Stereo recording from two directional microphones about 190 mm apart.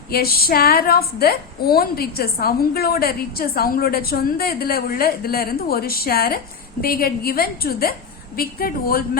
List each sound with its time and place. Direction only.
0.1 s a woman's voice: 55° left (ahead or behind)